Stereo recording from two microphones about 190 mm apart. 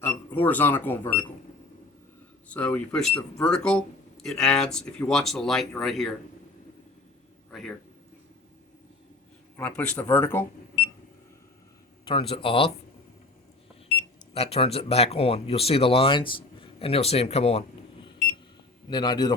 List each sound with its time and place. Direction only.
0.0 s speech: 10° left (ahead or behind)
2.5 s speech: 5° left (ahead or behind)
9.6 s speech: 10° left (ahead or behind)
12.3 s a man's voice: 30° left (ahead or behind)
14.3 s speech: 30° left (ahead or behind)
18.9 s a man's voice: 20° left (ahead or behind)